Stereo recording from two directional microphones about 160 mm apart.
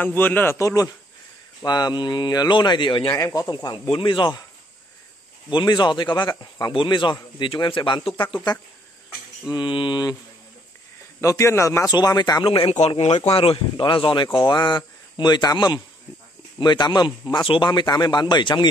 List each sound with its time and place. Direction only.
0.0 s a man's voice: 10° left (ahead or behind); by 4.5 s 30° left (ahead or behind)
5.5 s speech: 30° left (ahead or behind)
9.5 s speech: 30° left (ahead or behind)
11.1 s speech: 20° left (ahead or behind)
12.4 s speech: 35° left (ahead or behind)